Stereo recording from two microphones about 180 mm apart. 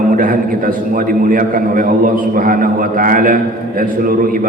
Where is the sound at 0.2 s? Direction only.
50° right (ahead or behind).